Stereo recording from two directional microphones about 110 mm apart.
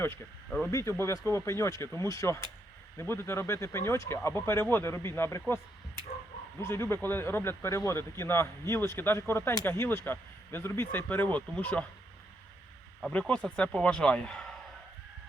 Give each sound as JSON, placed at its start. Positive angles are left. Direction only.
{"t": 0.7, "sound": "speech", "side_deg": 25}
{"t": 6.6, "sound": "speech", "side_deg": 20}
{"t": 13.1, "sound": "speech", "side_deg": 10}